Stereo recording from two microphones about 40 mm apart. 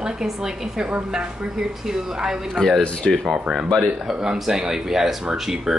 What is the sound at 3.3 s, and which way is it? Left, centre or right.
Speech, right.